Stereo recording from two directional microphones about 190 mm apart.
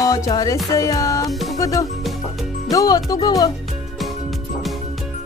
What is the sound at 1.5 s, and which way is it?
Music, 15° left (ahead or behind).